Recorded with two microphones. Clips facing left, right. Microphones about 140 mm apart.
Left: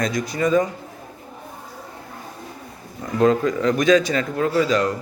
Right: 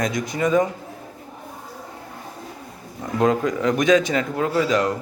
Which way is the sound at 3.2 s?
15° right (ahead or behind).